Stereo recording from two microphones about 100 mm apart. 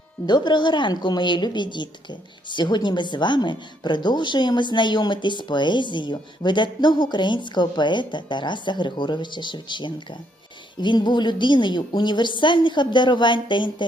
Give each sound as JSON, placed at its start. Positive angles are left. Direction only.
{"t": 0.3, "sound": "a woman's voice", "side_deg": 45}